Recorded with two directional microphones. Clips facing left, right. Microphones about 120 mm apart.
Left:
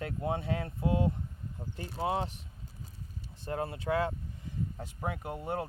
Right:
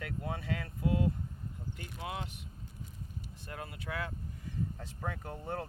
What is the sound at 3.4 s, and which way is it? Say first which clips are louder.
Speech: left 11 dB; 30° left (ahead or behind).